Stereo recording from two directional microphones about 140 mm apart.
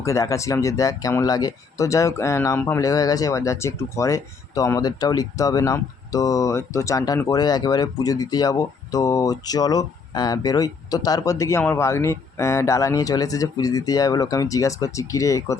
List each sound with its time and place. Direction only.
0.0 s speech: 20° left (ahead or behind)